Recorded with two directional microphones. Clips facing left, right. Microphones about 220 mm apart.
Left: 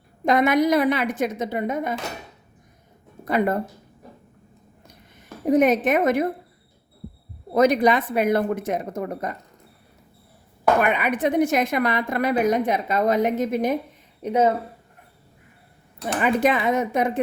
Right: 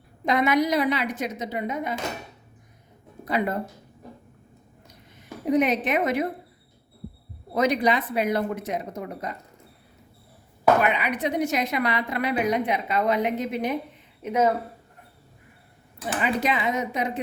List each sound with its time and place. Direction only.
0.3 s a woman's voice: 50° left (ahead or behind)
3.2 s a woman's voice: 50° left (ahead or behind)
5.5 s a woman's voice: 45° left (ahead or behind)
7.5 s a woman's voice: 45° left (ahead or behind)
10.8 s a woman's voice: 50° left (ahead or behind)
14.2 s speech: 35° left (ahead or behind)
16.2 s a woman's voice: 50° left (ahead or behind)